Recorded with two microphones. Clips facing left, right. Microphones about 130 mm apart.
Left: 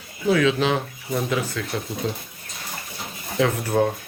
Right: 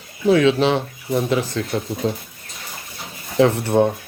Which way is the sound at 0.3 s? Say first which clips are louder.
Right 4 dB; 30° right (ahead or behind).